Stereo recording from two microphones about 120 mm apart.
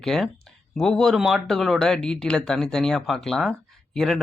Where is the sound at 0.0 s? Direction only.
5° left (ahead or behind).